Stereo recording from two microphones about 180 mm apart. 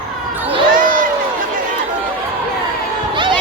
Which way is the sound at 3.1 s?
25° right (ahead or behind).